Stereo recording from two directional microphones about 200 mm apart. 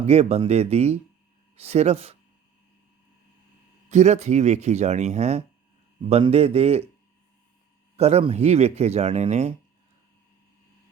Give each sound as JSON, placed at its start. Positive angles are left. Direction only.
{"t": 0.0, "sound": "speech", "side_deg": -30}
{"t": 3.8, "sound": "speech", "side_deg": -35}
{"t": 7.9, "sound": "speech", "side_deg": -30}